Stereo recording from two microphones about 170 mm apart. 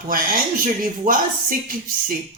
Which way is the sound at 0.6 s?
55° right (ahead or behind).